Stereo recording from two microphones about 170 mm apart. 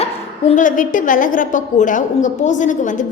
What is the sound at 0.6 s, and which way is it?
A woman's voice, 50° left (ahead or behind).